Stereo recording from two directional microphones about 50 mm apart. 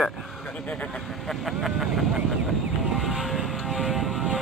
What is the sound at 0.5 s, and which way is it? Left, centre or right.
Vehicle, left.